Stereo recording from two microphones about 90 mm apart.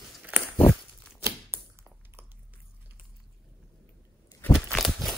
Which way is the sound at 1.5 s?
20° right (ahead or behind).